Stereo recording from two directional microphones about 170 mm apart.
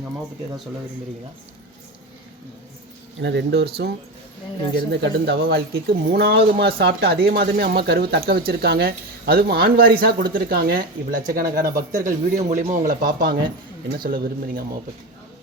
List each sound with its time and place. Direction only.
3.2 s speech: 85° right
4.9 s speech: 85° right; by 14.6 s 65° right (ahead or behind)